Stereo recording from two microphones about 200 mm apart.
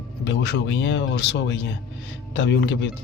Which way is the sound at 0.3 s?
60° left (ahead or behind).